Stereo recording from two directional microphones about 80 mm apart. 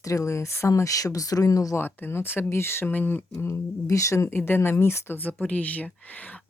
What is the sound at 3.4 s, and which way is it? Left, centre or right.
Speech, left.